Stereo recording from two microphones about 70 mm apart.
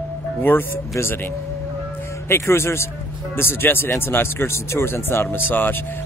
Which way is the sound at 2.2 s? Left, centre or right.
Left.